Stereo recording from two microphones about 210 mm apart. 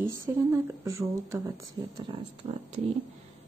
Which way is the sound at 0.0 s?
10° right (ahead or behind).